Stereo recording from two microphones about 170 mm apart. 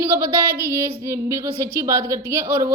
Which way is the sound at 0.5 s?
15° right (ahead or behind).